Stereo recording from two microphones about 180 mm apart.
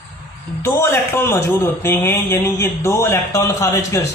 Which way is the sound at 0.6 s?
15° left (ahead or behind).